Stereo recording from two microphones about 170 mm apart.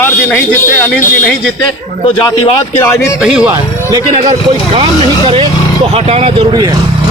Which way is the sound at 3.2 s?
5° right (ahead or behind).